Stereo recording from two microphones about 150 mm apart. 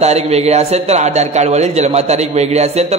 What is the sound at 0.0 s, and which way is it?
A man's voice, 45° right (ahead or behind).